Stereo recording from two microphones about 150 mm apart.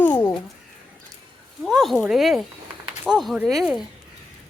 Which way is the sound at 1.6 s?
Centre (ahead or behind).